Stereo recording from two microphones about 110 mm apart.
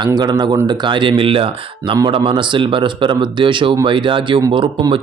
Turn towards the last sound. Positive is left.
turn(degrees=-50)  # may be behind; listen again after turning